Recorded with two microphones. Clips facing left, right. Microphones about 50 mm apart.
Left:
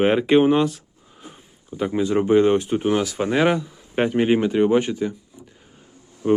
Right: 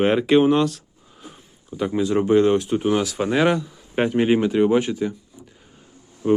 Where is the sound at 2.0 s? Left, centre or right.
Centre.